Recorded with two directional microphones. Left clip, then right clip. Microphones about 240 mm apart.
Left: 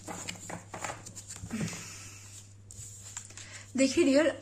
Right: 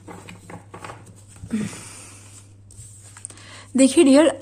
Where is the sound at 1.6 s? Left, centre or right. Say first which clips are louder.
Right 5 dB; right.